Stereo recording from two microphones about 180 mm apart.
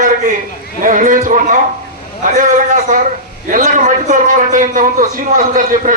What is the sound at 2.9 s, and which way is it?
A man's voice, 50° right (ahead or behind).